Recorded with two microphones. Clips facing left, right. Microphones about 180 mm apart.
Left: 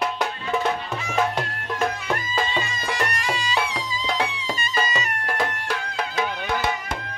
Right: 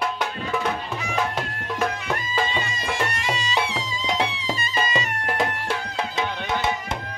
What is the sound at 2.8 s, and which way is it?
Music, 25° right (ahead or behind).